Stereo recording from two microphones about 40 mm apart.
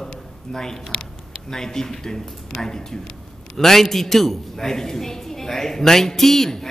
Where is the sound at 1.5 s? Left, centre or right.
Centre.